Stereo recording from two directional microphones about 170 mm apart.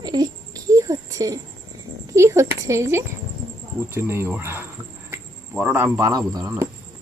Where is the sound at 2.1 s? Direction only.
15° right (ahead or behind).